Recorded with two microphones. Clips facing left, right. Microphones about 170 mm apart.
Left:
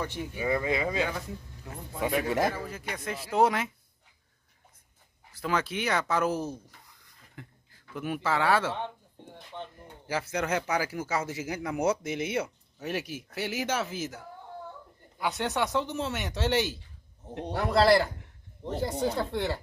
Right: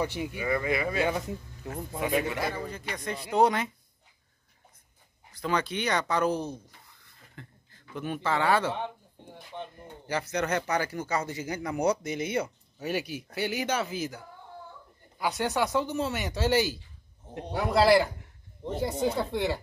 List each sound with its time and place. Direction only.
0.0 s speech: 10° right (ahead or behind)
0.4 s speech: 20° left (ahead or behind)
2.2 s a man's voice: 40° left (ahead or behind)
2.5 s speech: 5° left (ahead or behind)
5.3 s speech: 5° left (ahead or behind)
8.7 s speech: 10° right (ahead or behind)
10.0 s a man's voice: 5° left (ahead or behind)